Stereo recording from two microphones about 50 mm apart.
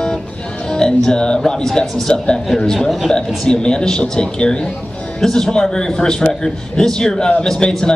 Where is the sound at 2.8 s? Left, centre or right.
Centre.